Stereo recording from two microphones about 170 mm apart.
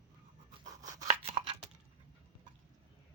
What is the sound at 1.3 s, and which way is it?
Tearing, 30° right (ahead or behind).